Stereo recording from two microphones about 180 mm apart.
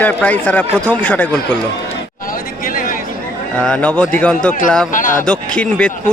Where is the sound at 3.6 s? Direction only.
5° left (ahead or behind).